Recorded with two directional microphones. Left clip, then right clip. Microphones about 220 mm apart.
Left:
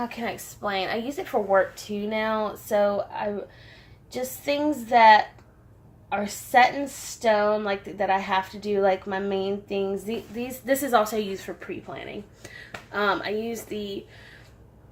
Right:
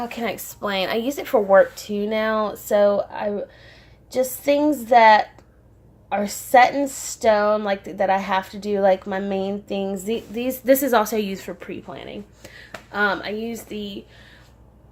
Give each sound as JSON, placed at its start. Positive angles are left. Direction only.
{"t": 0.0, "sound": "a woman's voice", "side_deg": -45}